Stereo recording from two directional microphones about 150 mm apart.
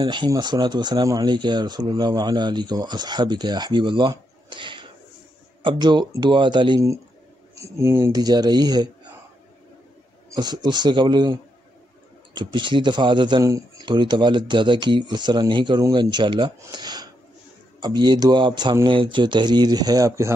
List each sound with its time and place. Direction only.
0.0 s a man's voice: 30° right (ahead or behind)
7.6 s speech: 20° right (ahead or behind)
10.3 s speech: 30° right (ahead or behind)
12.4 s a man's voice: 30° right (ahead or behind)